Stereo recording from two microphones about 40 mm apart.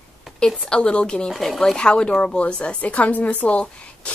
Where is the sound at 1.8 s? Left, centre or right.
Left.